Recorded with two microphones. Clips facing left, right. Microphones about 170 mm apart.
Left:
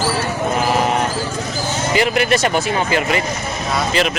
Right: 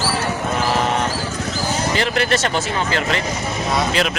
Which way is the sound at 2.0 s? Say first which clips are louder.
Left 5 dB; 10° left (ahead or behind).